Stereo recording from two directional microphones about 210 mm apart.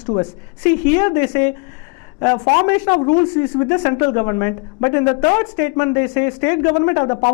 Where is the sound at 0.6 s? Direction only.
10° left (ahead or behind).